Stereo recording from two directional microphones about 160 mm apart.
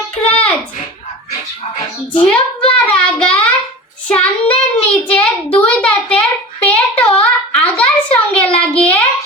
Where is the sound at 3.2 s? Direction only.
5° left (ahead or behind).